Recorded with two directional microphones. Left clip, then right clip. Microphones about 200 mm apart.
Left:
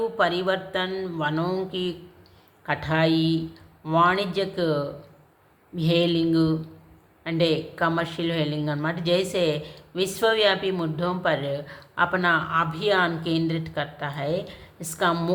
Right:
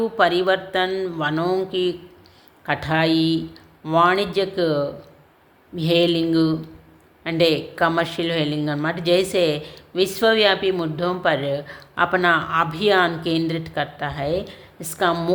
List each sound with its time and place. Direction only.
0.0 s a woman's voice: 25° right (ahead or behind)